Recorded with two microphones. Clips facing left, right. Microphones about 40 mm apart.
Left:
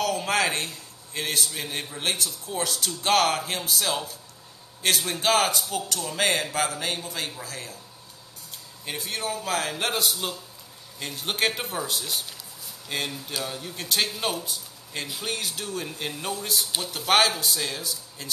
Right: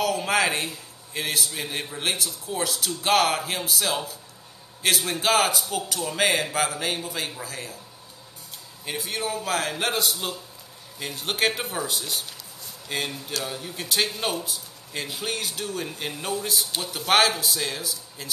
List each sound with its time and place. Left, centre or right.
0.0 s a man's voice: centre
8.8 s a man's voice: centre